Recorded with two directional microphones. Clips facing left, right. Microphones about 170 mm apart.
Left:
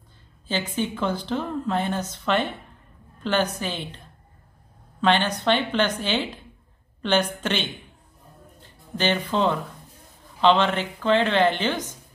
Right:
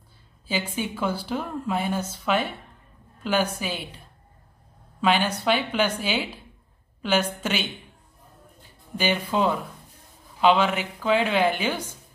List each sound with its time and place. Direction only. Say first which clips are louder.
0.5 s a woman's voice: left 2 dB; 10° right (ahead or behind)
5.0 s a woman's voice: left 1 dB; 10° right (ahead or behind)
8.9 s a woman's voice: left 1 dB; 10° right (ahead or behind)